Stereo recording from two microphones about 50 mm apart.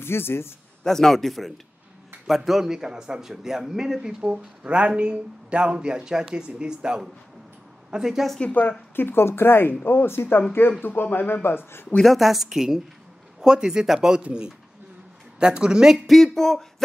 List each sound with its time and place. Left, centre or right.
0.0 s a man's voice: left
0.8 s a woman's voice: centre
4.6 s speech: right
8.6 s a woman's voice: left
8.9 s speech: left
12.0 s a woman's voice: centre
16.1 s a woman's voice: centre